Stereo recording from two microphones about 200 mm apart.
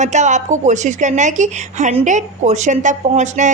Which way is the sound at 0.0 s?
35° right (ahead or behind).